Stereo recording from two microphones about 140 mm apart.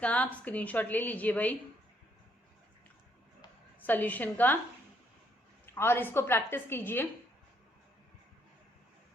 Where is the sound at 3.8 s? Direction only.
10° left (ahead or behind).